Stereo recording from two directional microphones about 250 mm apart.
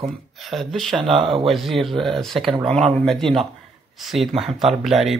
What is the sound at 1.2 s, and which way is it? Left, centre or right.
Speech, right.